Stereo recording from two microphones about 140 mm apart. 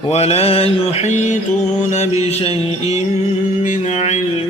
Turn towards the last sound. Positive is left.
turn(degrees=55)  # may be behind; listen again after turning